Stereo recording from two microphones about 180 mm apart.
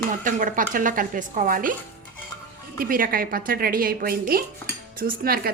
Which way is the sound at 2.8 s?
50° right (ahead or behind).